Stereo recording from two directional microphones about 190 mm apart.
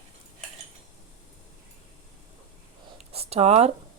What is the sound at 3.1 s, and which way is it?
Speech, 35° right (ahead or behind).